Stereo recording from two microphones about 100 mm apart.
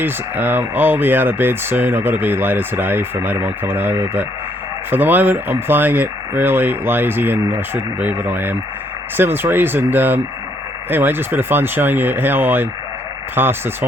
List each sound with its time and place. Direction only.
0.0 s speech: 20° right (ahead or behind)